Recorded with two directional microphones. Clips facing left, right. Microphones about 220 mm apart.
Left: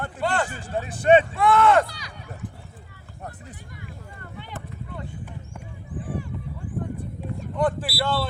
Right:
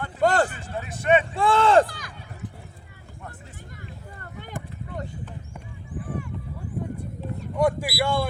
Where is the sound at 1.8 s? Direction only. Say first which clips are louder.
Right 3 dB; 50° right (ahead or behind).